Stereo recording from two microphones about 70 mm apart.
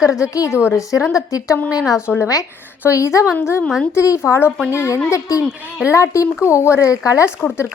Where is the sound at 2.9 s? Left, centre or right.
Left.